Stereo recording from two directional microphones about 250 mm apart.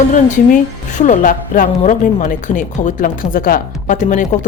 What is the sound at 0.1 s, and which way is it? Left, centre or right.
A woman's voice, left.